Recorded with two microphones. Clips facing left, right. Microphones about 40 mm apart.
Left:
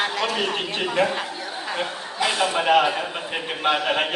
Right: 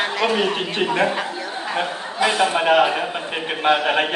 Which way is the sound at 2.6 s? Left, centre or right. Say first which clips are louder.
Even; centre.